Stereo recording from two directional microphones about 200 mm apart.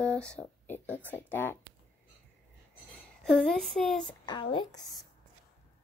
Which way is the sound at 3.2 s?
5° left (ahead or behind).